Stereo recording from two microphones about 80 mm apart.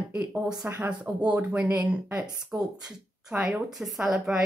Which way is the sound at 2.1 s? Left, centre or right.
Right.